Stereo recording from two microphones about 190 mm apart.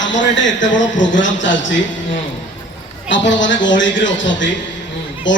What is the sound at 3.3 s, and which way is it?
A man's voice, 75° left (ahead or behind).